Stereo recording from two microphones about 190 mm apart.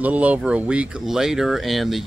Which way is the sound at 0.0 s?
5° right (ahead or behind).